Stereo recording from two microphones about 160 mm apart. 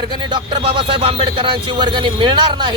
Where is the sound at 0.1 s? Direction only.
30° right (ahead or behind).